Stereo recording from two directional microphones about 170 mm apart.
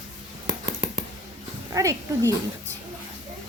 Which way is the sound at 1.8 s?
20° right (ahead or behind).